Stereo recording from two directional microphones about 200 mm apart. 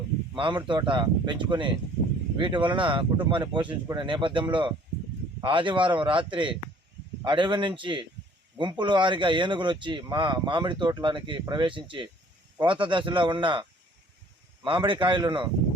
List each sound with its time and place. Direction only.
0.3 s a man's voice: 25° right (ahead or behind)